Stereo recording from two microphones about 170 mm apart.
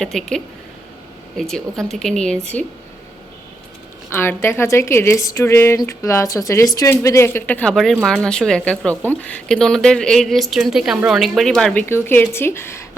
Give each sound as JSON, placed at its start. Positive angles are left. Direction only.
{"t": 0.0, "sound": "a woman's voice", "side_deg": 5}
{"t": 4.1, "sound": "a woman's voice", "side_deg": 15}